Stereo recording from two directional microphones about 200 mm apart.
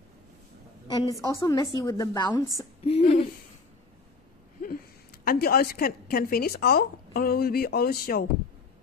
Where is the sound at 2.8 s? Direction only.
30° left (ahead or behind).